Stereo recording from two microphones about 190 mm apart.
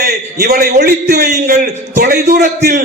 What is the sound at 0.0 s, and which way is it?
A man's voice, 55° right (ahead or behind).